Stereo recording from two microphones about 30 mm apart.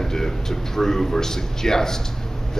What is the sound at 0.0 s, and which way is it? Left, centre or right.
A man's voice, centre.